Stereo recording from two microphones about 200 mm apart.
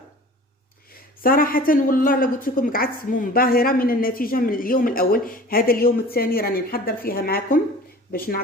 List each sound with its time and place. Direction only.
1.2 s a woman's voice: 45° left (ahead or behind)